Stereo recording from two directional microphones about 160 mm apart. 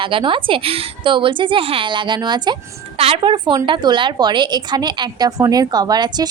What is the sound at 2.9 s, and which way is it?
A woman's voice, 40° right (ahead or behind).